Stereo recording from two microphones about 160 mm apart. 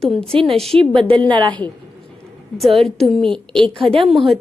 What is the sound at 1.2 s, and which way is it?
Speech, 30° right (ahead or behind).